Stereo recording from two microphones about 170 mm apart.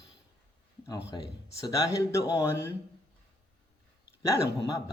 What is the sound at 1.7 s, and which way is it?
Speech, 20° left (ahead or behind).